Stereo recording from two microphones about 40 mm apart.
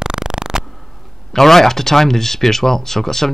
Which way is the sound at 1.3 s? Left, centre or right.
Centre.